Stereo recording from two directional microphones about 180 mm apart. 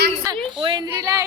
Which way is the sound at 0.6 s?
20° right (ahead or behind).